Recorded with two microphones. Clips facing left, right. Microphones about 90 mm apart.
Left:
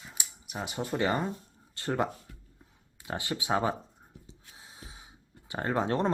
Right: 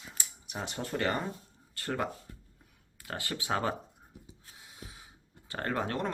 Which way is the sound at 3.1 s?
20° left (ahead or behind).